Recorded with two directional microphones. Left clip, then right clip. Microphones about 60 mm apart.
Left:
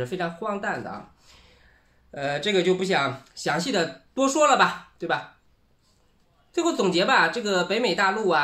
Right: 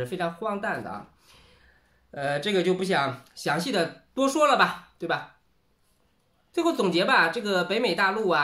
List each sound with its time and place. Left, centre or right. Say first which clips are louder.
0.0 s speech: left 1 dB; right
6.5 s speech: left 1 dB; right